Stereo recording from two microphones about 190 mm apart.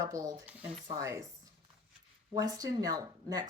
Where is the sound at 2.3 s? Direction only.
20° right (ahead or behind).